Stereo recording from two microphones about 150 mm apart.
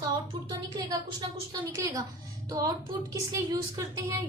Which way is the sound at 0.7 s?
25° right (ahead or behind).